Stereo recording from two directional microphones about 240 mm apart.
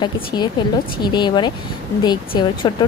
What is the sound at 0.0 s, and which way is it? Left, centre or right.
Speech, centre.